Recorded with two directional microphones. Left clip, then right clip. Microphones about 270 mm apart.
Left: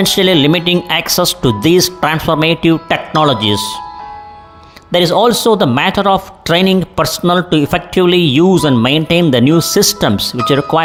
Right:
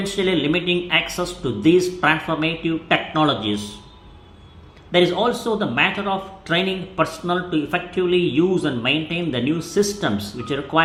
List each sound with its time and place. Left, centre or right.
0.0 s speech: left
4.9 s speech: left